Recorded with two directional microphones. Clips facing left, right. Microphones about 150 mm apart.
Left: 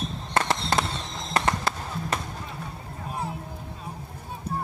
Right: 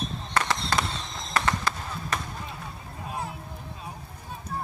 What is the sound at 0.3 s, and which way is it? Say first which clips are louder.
Fireworks: left 2 dB; 25° left (ahead or behind).